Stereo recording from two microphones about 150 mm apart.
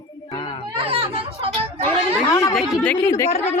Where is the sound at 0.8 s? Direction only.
40° right (ahead or behind).